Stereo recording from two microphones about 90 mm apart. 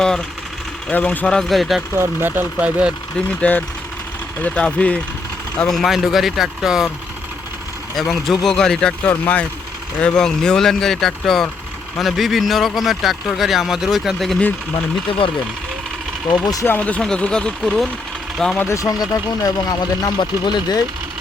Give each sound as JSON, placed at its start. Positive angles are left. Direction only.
{"t": 0.9, "sound": "speech", "side_deg": 15}
{"t": 2.0, "sound": "speech", "side_deg": -20}
{"t": 3.2, "sound": "speech", "side_deg": 15}
{"t": 7.9, "sound": "speech", "side_deg": 0}
{"t": 16.3, "sound": "speech", "side_deg": 45}
{"t": 16.6, "sound": "speech", "side_deg": 20}
{"t": 18.6, "sound": "speech", "side_deg": 35}